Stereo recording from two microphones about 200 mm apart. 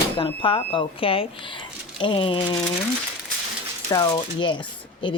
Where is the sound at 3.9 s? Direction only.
20° left (ahead or behind).